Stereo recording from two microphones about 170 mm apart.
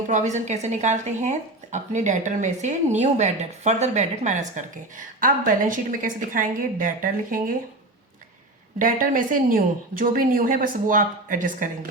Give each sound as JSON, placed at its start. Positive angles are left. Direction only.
{"t": 0.1, "sound": "speech", "side_deg": -45}
{"t": 8.8, "sound": "speech", "side_deg": -55}